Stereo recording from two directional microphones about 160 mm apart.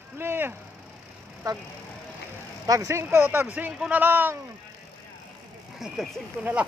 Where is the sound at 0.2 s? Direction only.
15° right (ahead or behind).